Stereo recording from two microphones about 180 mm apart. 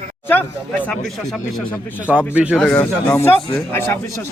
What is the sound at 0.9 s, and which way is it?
Speech, centre (ahead or behind).